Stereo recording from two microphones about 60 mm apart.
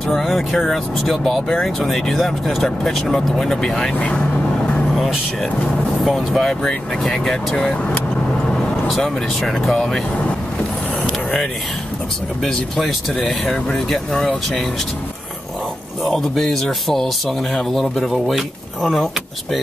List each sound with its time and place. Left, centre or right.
0.1 s speech: centre
4.0 s vehicle: left
4.9 s speech: centre
8.5 s vehicle: centre
8.9 s speech: centre
12.4 s speech: centre
16.0 s speech: centre